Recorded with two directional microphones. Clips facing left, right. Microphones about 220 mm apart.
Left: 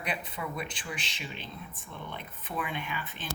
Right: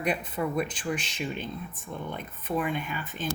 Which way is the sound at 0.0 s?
45° right (ahead or behind).